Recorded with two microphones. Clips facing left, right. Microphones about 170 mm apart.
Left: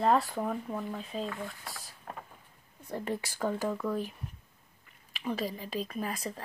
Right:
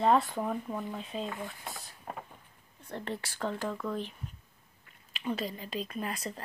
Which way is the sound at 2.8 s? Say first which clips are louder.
Left 3 dB; 10° left (ahead or behind).